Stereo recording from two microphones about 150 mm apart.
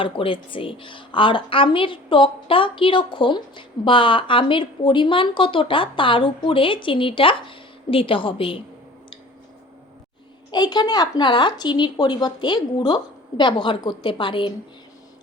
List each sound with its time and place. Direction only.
0.0 s a woman's voice: 35° left (ahead or behind)
10.5 s a woman's voice: 30° left (ahead or behind)